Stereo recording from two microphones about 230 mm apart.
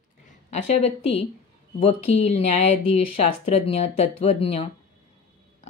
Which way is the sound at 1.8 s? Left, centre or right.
Left.